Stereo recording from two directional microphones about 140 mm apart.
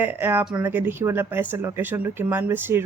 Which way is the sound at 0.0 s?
15° right (ahead or behind).